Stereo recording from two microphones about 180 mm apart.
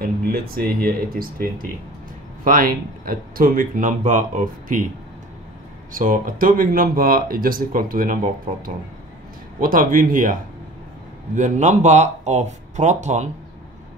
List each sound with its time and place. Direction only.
0.0 s speech: 55° right (ahead or behind)
5.9 s speech: 50° right (ahead or behind)